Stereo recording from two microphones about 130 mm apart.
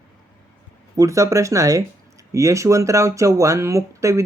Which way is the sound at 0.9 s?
25° right (ahead or behind).